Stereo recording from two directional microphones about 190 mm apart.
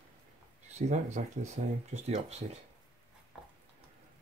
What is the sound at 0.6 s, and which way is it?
Speech, 35° right (ahead or behind).